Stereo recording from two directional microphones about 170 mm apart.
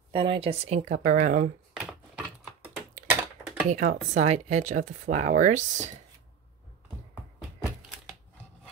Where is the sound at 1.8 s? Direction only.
5° right (ahead or behind).